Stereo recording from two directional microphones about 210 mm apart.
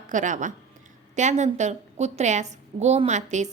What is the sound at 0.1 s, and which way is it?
A woman's voice, 35° right (ahead or behind).